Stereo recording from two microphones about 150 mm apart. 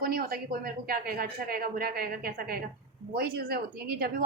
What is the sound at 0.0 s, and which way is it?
A woman's voice, 80° right.